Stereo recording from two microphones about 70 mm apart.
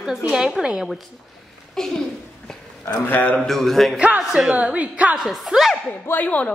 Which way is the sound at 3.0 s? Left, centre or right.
Left.